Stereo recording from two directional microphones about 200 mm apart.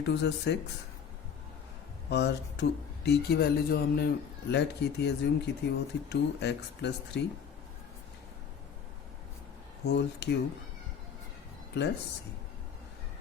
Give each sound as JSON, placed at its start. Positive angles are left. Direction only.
{"t": 0.0, "sound": "speech", "side_deg": 60}
{"t": 2.0, "sound": "speech", "side_deg": 55}
{"t": 9.8, "sound": "speech", "side_deg": 60}